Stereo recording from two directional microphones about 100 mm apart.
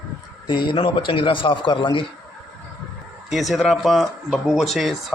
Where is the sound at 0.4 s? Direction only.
50° left (ahead or behind).